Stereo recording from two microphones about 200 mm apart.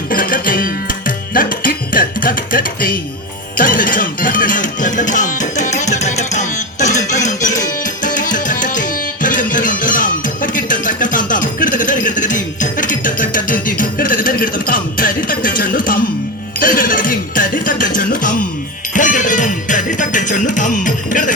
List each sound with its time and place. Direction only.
0.1 s music: 45° left (ahead or behind)
3.6 s speech: 45° left (ahead or behind)
8.0 s tabla: 40° left (ahead or behind)
16.6 s music: 45° left (ahead or behind)